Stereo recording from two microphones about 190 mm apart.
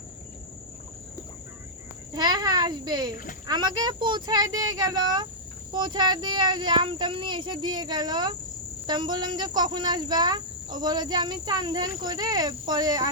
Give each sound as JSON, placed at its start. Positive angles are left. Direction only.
{"t": 2.1, "sound": "a child's voice", "side_deg": -20}